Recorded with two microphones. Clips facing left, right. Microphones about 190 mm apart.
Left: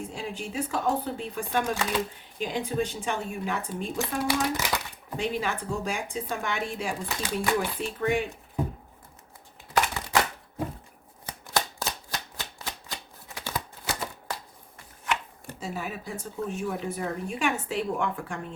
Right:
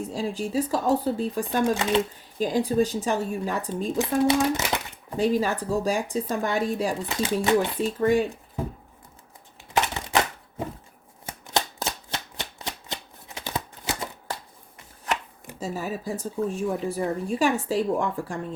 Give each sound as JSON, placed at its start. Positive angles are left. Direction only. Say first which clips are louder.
{"t": 0.1, "sound": "speech", "louder": "right 7 dB", "side_deg": -35}
{"t": 1.7, "sound": "speech", "louder": "right 5 dB", "side_deg": -25}
{"t": 2.4, "sound": "speech", "louder": "right 6 dB", "side_deg": -35}
{"t": 3.9, "sound": "speech", "louder": "right 7 dB", "side_deg": -25}
{"t": 5.1, "sound": "speech", "louder": "right 6 dB", "side_deg": -40}
{"t": 7.0, "sound": "speech", "louder": "right 6 dB", "side_deg": -20}
{"t": 7.8, "sound": "speech", "louder": "right 6 dB", "side_deg": -40}
{"t": 9.7, "sound": "a sound", "louder": "right 1 dB", "side_deg": -25}
{"t": 11.3, "sound": "shuffling cards", "louder": "right 2 dB", "side_deg": -20}
{"t": 13.3, "sound": "a sound", "louder": "right 2 dB", "side_deg": -20}
{"t": 15.6, "sound": "speech", "louder": "right 5 dB", "side_deg": -40}